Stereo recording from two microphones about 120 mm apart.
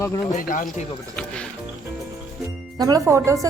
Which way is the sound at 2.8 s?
30° right (ahead or behind).